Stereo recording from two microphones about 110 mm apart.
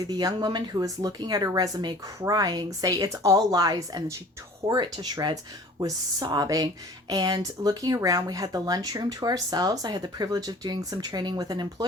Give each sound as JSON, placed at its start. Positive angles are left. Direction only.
{"t": 0.0, "sound": "speech", "side_deg": -35}